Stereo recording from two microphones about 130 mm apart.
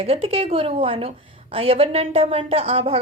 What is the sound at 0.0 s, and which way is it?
A woman's voice, 50° right (ahead or behind).